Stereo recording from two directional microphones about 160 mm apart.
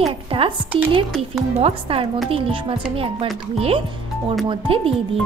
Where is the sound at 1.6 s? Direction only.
35° right (ahead or behind).